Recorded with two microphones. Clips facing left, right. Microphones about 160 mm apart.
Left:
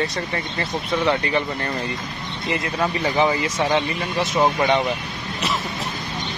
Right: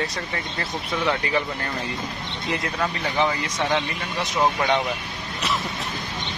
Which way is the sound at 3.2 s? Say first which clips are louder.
Left 3 dB; 5° left (ahead or behind).